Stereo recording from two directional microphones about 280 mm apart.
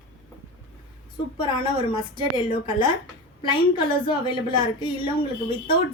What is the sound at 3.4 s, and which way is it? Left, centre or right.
A woman's voice, centre.